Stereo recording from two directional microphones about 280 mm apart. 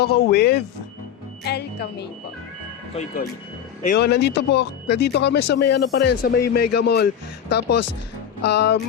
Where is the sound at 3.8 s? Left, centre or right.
Left.